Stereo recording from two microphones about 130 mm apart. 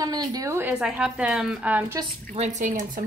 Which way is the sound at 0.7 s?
5° right (ahead or behind).